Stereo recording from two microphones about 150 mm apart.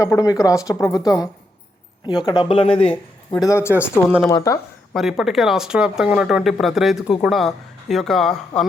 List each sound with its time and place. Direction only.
0.0 s speech: 20° left (ahead or behind); by 2.9 s 40° left (ahead or behind)
3.4 s speech: 20° left (ahead or behind)
4.9 s speech: centre (ahead or behind)